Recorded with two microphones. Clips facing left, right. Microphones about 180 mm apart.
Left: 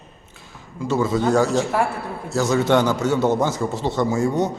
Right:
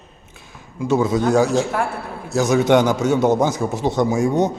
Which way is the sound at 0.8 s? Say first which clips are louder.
Right 3 dB; 15° right (ahead or behind).